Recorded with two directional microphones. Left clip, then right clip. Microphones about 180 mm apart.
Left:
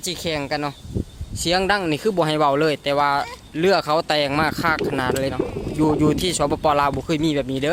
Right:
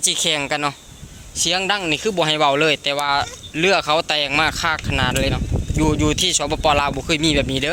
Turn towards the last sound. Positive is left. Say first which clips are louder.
# right 3 dB
turn(degrees=10)  # may be behind; listen again after turning